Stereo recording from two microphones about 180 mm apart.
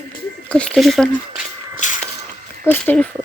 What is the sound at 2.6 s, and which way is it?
Speech, 10° left (ahead or behind).